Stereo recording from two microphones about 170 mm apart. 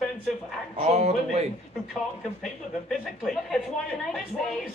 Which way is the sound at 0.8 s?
40° right (ahead or behind).